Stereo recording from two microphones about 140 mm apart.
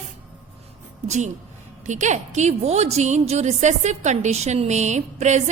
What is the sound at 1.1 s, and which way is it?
A woman's voice, 60° right (ahead or behind).